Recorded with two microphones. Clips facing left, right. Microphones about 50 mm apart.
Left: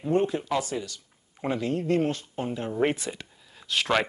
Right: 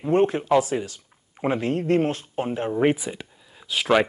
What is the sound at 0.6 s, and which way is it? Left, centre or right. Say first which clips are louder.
Speech: right 7 dB; right.